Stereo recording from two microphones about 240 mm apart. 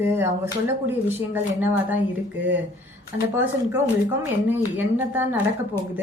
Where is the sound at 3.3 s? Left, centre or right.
Centre.